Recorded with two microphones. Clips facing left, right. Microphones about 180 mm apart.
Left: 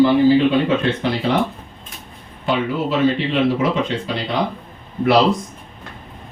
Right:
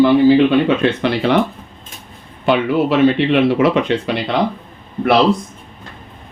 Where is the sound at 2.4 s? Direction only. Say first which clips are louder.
Right 5 dB; 70° right (ahead or behind).